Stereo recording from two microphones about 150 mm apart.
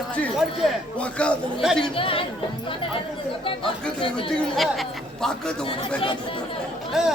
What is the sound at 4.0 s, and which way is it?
Speech, 35° left (ahead or behind).